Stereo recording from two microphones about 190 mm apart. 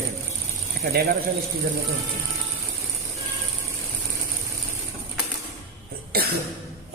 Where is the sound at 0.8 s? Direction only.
50° right (ahead or behind).